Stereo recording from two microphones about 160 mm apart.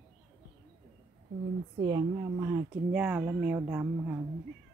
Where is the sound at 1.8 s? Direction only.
25° right (ahead or behind).